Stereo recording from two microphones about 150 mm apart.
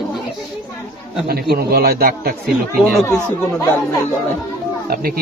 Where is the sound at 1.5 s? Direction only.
90° right.